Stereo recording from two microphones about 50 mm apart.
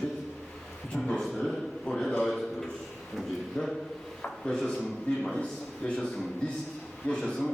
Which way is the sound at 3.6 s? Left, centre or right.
Centre.